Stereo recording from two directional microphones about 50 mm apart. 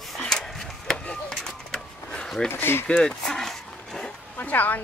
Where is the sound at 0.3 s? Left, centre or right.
Centre.